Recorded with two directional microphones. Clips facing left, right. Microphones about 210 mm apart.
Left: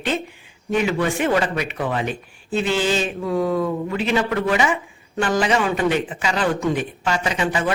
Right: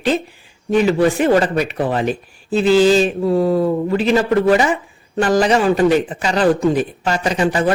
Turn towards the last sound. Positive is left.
turn(degrees=-40)  # may be behind; listen again after turning